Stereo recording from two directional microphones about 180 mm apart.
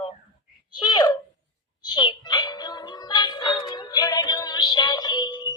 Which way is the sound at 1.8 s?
25° left (ahead or behind).